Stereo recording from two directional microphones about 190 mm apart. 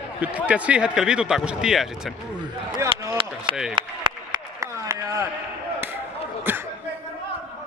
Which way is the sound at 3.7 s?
25° right (ahead or behind).